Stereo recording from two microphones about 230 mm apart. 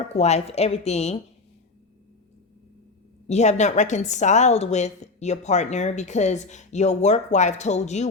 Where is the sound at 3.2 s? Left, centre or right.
Left.